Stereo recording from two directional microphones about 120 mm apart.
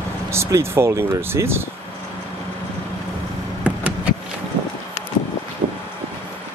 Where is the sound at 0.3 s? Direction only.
20° right (ahead or behind).